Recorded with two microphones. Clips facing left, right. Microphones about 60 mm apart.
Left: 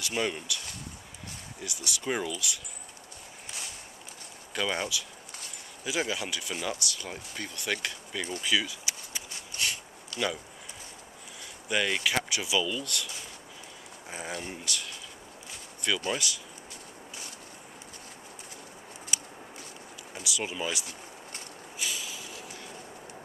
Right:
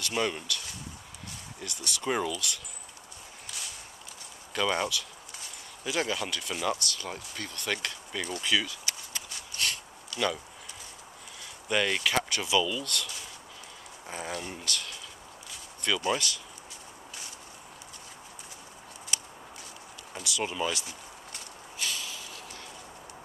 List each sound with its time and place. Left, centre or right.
0.0 s speech: centre
1.6 s speech: centre
4.6 s speech: centre
8.5 s a sound: centre
10.1 s speech: left
11.7 s speech: centre
19.1 s a sound: centre
20.2 s speech: centre
21.7 s a sound: centre